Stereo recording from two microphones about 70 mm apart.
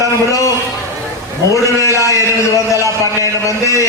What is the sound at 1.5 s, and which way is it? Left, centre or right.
A man's voice, left.